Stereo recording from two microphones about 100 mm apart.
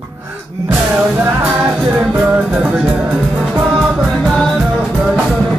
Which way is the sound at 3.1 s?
Centre (ahead or behind).